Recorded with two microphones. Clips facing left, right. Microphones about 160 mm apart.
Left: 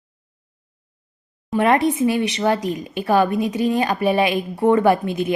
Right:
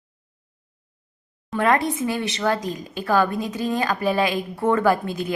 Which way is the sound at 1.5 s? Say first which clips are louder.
Left 4 dB; 20° left (ahead or behind).